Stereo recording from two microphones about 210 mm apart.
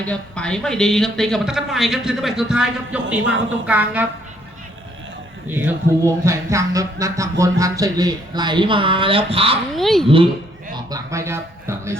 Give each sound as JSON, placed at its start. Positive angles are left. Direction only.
{"t": 0.0, "sound": "speech", "side_deg": 5}
{"t": 5.5, "sound": "a sound", "side_deg": -10}
{"t": 9.7, "sound": "speech", "side_deg": 0}
{"t": 10.8, "sound": "speech", "side_deg": -15}